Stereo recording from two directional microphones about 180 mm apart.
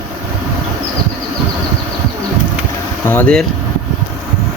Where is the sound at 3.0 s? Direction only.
10° left (ahead or behind).